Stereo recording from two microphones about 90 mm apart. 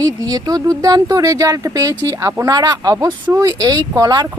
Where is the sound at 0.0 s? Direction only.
45° right (ahead or behind).